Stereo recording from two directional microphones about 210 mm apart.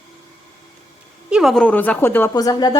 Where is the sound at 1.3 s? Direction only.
Centre (ahead or behind); by 2.8 s 20° left (ahead or behind).